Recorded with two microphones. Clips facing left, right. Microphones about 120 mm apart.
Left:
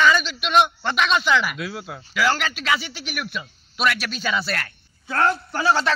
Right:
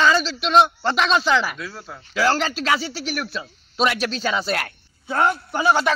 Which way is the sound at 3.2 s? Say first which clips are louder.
Right 2 dB; 35° right (ahead or behind).